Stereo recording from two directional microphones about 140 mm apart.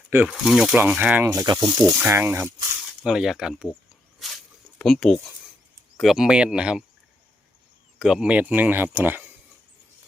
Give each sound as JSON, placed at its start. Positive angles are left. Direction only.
{"t": 0.1, "sound": "speech", "side_deg": -15}
{"t": 0.3, "sound": "speech", "side_deg": 0}
{"t": 1.3, "sound": "speech", "side_deg": -30}
{"t": 2.0, "sound": "speech", "side_deg": -15}
{"t": 3.0, "sound": "speech", "side_deg": -5}
{"t": 4.8, "sound": "speech", "side_deg": 0}
{"t": 7.9, "sound": "speech", "side_deg": -5}